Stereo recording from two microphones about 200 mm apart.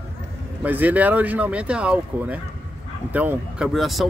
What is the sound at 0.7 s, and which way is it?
Speech, 10° right (ahead or behind).